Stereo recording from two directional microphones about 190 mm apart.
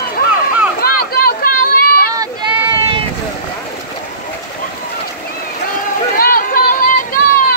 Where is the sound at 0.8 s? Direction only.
50° left (ahead or behind).